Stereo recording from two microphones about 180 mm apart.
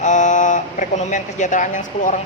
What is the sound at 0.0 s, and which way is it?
Speech, 45° left (ahead or behind).